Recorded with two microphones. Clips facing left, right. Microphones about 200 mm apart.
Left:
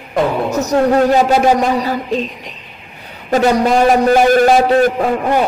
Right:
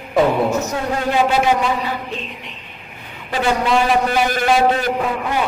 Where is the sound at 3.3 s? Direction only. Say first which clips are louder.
Left 6 dB; 45° left (ahead or behind).